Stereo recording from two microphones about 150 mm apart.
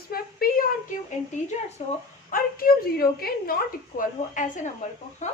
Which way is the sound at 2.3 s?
80° left.